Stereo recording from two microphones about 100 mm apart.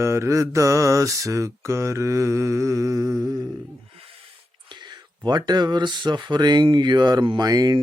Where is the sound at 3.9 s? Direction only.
65° right (ahead or behind).